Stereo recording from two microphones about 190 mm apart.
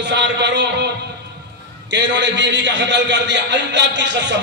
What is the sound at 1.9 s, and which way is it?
A man's voice, 70° right (ahead or behind).